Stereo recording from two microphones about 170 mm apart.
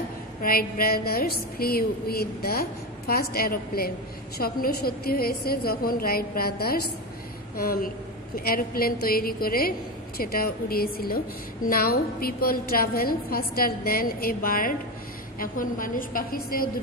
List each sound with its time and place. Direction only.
0.4 s a woman's voice: 60° left (ahead or behind)